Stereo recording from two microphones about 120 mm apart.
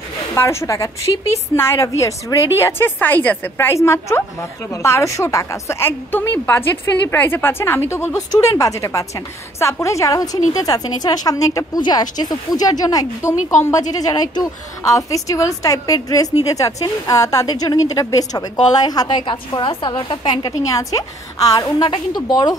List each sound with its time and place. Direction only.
0.3 s a woman's voice: 20° left (ahead or behind); by 20.5 s 40° left (ahead or behind)
20.6 s a woman's voice: 30° left (ahead or behind)
21.6 s a woman's voice: 45° left (ahead or behind)